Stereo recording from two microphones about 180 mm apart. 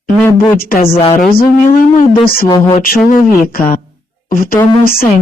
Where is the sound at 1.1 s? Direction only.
50° left (ahead or behind).